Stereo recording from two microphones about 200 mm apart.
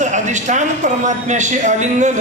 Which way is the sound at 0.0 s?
35° right (ahead or behind).